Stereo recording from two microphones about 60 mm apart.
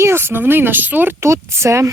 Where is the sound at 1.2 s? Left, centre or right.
Right.